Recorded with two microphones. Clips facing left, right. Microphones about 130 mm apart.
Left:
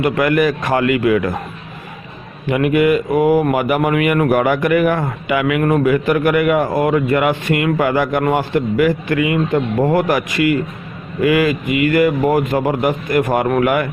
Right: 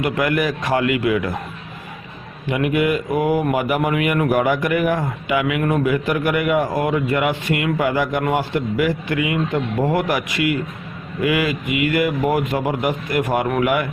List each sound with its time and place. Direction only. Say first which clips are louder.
0.0 s speech: left 5 dB; 55° left (ahead or behind)
2.5 s speech: left 5 dB; 60° left (ahead or behind)